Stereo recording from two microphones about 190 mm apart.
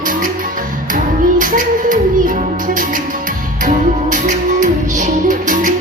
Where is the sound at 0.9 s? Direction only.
45° right (ahead or behind).